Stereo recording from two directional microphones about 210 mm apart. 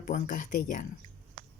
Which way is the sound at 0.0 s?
40° left (ahead or behind).